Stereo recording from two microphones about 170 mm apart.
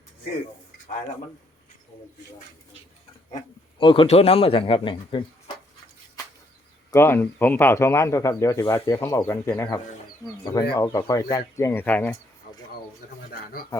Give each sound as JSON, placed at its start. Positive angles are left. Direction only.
{"t": 3.3, "sound": "a man's voice", "side_deg": 30}
{"t": 6.9, "sound": "speech", "side_deg": 15}
{"t": 13.3, "sound": "speech", "side_deg": 60}